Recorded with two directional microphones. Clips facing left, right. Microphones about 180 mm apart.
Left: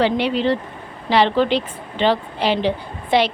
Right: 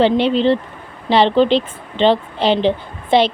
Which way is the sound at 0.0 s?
25° right (ahead or behind).